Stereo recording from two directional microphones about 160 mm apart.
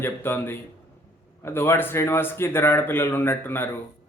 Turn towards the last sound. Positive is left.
turn(degrees=15)  # may be behind; listen again after turning